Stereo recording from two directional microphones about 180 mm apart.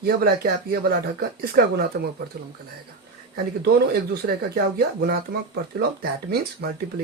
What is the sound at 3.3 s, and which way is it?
Speech, 60° right (ahead or behind).